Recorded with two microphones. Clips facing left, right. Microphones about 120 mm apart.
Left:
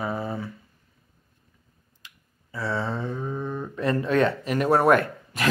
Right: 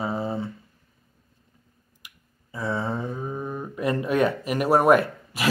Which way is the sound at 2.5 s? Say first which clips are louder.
Right 1 dB; 20° right (ahead or behind).